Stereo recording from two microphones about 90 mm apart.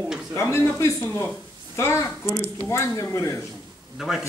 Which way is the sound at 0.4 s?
30° left (ahead or behind).